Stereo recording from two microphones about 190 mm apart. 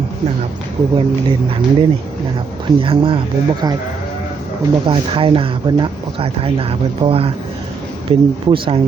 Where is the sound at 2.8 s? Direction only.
30° right (ahead or behind).